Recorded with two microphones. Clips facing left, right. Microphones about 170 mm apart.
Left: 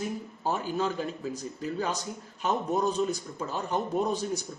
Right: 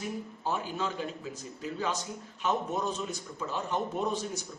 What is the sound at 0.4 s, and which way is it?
Speech, 40° left (ahead or behind).